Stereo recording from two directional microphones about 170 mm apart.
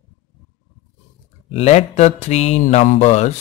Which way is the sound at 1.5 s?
40° left (ahead or behind).